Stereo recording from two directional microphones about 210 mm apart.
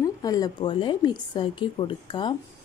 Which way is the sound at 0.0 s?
15° left (ahead or behind).